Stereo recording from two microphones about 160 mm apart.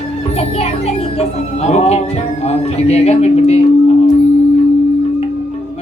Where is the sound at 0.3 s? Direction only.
40° left (ahead or behind).